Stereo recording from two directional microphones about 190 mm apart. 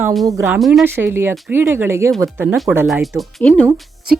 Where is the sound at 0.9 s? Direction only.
10° right (ahead or behind).